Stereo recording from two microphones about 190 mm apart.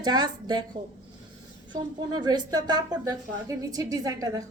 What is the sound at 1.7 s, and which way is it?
Speech, 20° right (ahead or behind).